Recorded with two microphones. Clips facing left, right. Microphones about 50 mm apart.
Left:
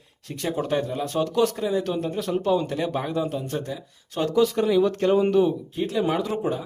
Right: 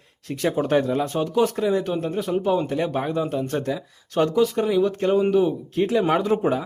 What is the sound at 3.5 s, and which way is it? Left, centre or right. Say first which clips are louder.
Speech: right 5 dB; right.